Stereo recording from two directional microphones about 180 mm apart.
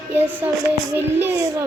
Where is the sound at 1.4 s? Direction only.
20° right (ahead or behind).